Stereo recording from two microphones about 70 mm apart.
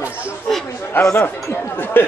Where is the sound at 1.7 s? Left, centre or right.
Left.